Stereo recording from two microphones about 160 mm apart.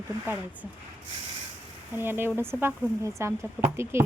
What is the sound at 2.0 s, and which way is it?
Speech, 15° right (ahead or behind).